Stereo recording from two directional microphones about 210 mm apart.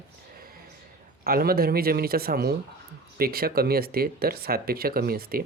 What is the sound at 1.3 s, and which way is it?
Speech, 45° right (ahead or behind).